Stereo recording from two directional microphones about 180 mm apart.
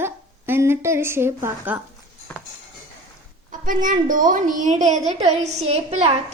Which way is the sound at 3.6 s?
45° right (ahead or behind).